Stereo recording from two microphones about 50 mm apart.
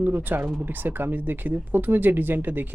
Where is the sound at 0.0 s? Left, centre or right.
Right.